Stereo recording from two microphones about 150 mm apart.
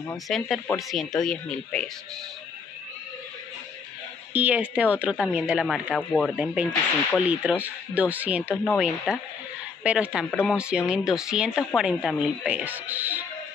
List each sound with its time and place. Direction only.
0.3 s a woman's voice: 5° left (ahead or behind)
4.3 s a woman's voice: 10° right (ahead or behind)
5.9 s a woman's voice: 5° left (ahead or behind)
6.3 s a woman's voice: 10° right (ahead or behind)
10.3 s speech: 15° left (ahead or behind)
10.6 s a woman's voice: 5° right (ahead or behind)